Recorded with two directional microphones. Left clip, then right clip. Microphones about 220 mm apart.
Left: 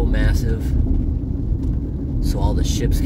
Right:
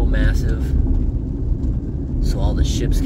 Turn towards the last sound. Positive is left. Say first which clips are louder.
# even
turn(degrees=25)  # may be behind; listen again after turning